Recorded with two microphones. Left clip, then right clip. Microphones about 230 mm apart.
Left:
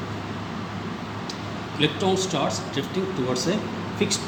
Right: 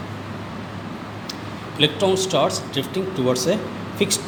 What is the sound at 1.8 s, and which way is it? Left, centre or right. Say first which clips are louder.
Speech: right 4 dB; right.